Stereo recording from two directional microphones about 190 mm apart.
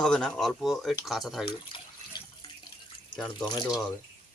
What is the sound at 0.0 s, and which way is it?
Speech, 5° left (ahead or behind).